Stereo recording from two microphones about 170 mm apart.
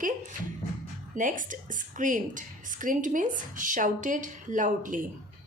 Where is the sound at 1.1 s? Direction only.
50° right (ahead or behind).